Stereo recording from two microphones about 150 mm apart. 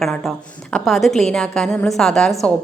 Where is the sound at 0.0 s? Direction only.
5° left (ahead or behind).